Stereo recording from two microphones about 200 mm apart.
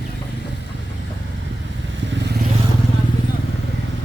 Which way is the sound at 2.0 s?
65° right (ahead or behind).